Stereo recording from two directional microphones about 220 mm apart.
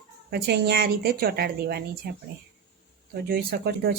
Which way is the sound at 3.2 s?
45° right (ahead or behind).